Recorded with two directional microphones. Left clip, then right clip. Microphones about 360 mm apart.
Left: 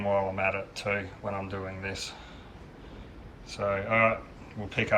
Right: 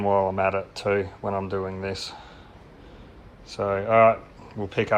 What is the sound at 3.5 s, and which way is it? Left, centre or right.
Speech, centre.